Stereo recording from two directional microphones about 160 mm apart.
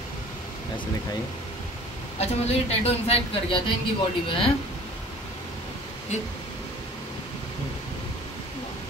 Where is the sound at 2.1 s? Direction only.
40° left (ahead or behind).